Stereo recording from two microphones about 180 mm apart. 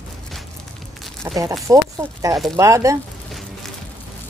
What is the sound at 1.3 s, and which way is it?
Speech, 20° right (ahead or behind).